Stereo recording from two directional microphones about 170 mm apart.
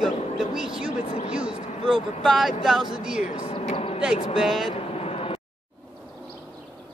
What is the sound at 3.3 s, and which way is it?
Speech, 40° left (ahead or behind).